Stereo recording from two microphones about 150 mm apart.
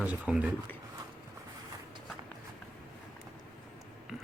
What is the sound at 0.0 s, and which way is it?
Speech, 10° right (ahead or behind).